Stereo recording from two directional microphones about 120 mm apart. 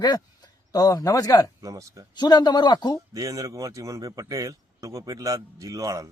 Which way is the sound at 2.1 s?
35° left (ahead or behind).